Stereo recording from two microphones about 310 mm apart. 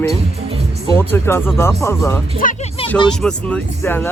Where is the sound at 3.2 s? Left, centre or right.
Centre.